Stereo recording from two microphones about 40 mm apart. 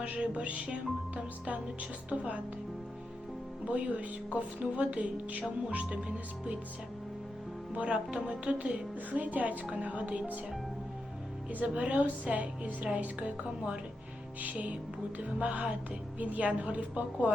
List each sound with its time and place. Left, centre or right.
0.2 s speech: right
3.7 s speech: right
7.8 s speech: right
9.2 s speech: right
11.6 s speech: right
14.4 s speech: right